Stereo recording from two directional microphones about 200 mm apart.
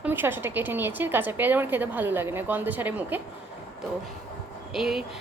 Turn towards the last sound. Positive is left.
turn(degrees=0)  # may be behind; listen again after turning